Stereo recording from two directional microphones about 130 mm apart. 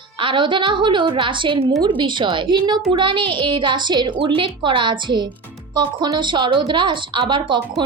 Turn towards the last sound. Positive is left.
turn(degrees=-40)  # may be behind; listen again after turning